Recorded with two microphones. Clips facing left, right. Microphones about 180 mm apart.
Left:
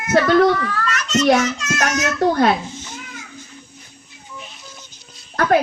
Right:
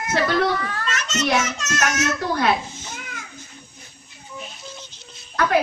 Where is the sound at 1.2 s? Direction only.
45° left (ahead or behind).